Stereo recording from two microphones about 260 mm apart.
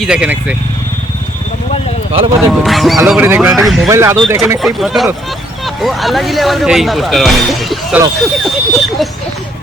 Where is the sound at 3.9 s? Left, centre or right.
Centre.